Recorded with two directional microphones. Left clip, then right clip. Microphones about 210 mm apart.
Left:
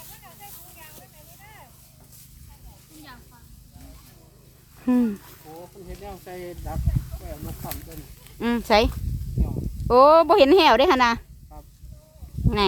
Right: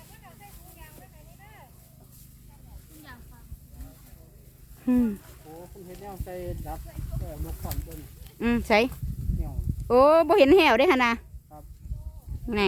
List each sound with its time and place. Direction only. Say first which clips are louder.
4.8 s speech: left 3 dB; 5° left (ahead or behind)
6.2 s speech: right 1 dB; 15° right (ahead or behind)
8.2 s speech: left 1 dB; centre (ahead or behind)